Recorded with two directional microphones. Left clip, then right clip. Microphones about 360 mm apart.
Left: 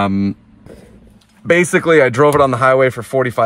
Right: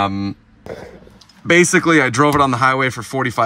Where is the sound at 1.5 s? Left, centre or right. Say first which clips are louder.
Left 1 dB; centre.